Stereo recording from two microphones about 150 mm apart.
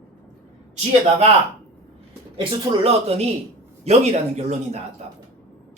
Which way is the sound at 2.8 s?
45° right (ahead or behind).